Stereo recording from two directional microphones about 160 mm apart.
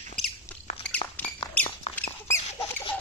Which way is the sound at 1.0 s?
35° left (ahead or behind).